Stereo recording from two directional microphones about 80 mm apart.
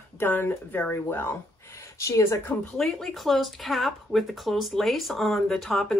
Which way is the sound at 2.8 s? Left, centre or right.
Centre.